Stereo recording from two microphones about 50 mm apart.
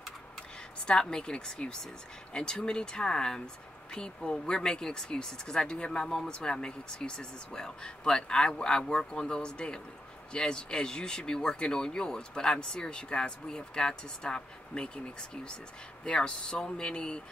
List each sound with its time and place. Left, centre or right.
0.8 s speech: centre
16.0 s speech: centre